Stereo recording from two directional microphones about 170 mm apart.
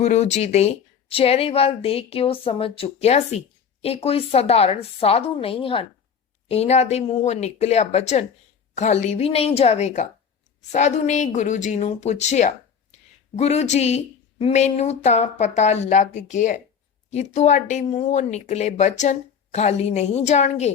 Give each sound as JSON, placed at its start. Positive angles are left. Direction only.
{"t": 0.0, "sound": "speech", "side_deg": 45}